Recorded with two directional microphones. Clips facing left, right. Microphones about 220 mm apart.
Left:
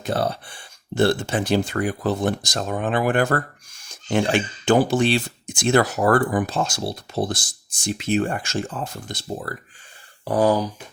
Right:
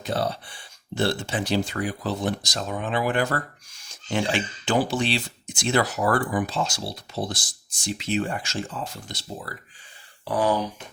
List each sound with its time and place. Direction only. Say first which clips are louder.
0.0 s speech: left 3 dB; 50° left (ahead or behind)